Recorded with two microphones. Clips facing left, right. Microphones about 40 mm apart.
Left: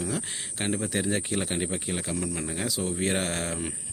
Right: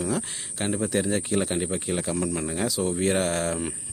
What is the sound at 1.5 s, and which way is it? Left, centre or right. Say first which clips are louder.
Speech: right 2 dB; centre.